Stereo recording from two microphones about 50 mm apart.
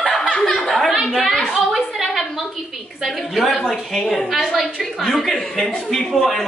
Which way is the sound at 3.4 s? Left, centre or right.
Centre.